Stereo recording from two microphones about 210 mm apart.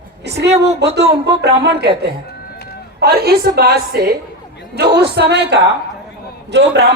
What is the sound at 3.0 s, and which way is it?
A woman's voice, 50° right (ahead or behind).